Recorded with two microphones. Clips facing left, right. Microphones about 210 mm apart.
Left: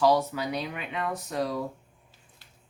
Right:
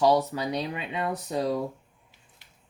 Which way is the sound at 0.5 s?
30° right (ahead or behind).